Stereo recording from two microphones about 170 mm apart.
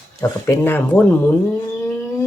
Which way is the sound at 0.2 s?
15° left (ahead or behind).